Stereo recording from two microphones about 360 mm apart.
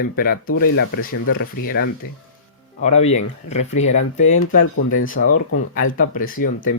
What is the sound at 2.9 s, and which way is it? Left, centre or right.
Speech, centre.